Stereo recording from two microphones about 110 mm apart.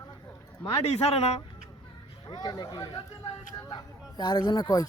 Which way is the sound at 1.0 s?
70° left (ahead or behind).